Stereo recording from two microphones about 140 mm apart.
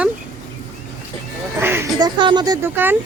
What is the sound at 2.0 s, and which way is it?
Speech, 30° right (ahead or behind).